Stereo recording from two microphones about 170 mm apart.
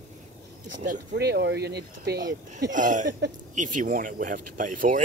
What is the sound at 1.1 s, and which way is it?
Speech, 75° right (ahead or behind).